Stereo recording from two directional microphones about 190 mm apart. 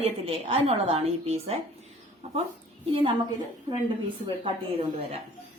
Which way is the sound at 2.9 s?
25° right (ahead or behind).